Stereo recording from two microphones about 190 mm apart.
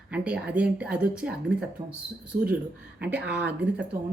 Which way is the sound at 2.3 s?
45° right (ahead or behind).